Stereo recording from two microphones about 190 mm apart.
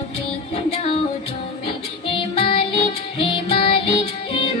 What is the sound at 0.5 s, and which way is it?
Music, 30° left (ahead or behind).